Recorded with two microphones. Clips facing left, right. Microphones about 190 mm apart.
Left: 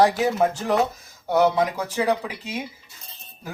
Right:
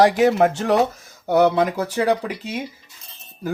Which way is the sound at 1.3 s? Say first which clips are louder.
Right 3 dB; 60° right (ahead or behind).